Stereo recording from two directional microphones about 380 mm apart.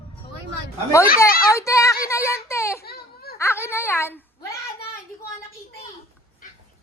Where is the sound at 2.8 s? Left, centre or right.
Left.